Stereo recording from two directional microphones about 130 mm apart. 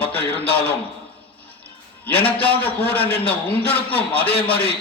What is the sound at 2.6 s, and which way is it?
A man's voice, 15° left (ahead or behind).